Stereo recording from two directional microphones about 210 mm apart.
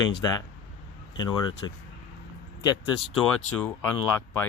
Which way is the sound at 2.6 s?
25° left (ahead or behind).